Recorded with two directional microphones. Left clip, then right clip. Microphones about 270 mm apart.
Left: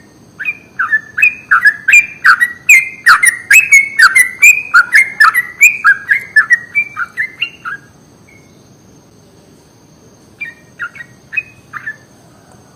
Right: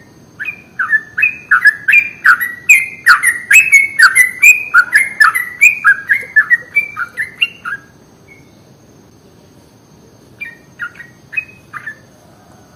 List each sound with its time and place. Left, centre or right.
0.3 s bird: left
6.9 s bird: centre
10.3 s bird: centre